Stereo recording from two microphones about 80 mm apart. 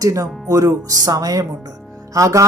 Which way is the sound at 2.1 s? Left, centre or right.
Right.